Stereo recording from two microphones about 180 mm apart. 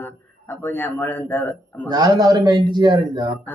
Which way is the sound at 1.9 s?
20° right (ahead or behind).